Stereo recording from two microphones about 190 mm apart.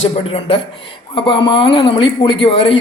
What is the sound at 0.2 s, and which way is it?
A man's voice, 30° left (ahead or behind).